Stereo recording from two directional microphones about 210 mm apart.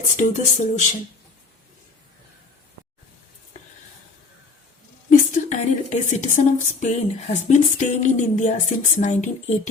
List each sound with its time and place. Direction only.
0.2 s a woman's voice: 35° left (ahead or behind)
5.0 s a woman's voice: 35° left (ahead or behind)